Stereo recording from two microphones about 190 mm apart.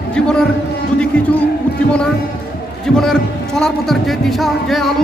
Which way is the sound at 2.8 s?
Centre (ahead or behind).